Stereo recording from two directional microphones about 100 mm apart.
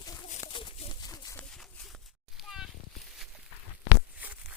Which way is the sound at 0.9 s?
40° left (ahead or behind).